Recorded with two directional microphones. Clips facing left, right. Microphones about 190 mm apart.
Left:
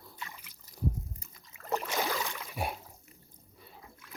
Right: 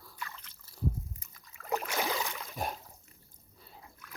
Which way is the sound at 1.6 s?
10° right (ahead or behind).